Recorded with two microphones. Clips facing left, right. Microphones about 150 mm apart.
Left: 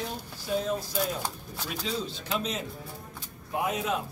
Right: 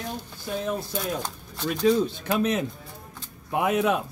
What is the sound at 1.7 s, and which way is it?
Speech, 50° right (ahead or behind).